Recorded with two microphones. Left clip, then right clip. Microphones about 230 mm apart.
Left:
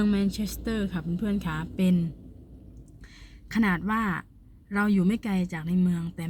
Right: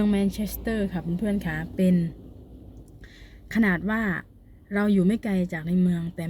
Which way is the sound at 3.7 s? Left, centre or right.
Right.